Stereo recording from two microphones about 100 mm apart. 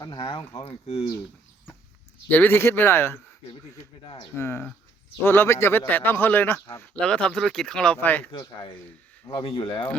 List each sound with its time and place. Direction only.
0.0 s speech: 50° left (ahead or behind)
2.3 s a man's voice: 20° left (ahead or behind)
4.0 s speech: 55° left (ahead or behind)
4.4 s a man's voice: 25° left (ahead or behind)
7.0 s speech: 5° left (ahead or behind)
7.9 s speech: 15° left (ahead or behind)
9.3 s speech: 60° left (ahead or behind)